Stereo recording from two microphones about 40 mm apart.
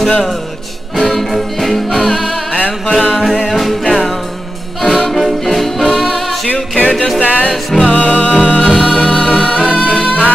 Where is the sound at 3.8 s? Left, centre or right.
Centre.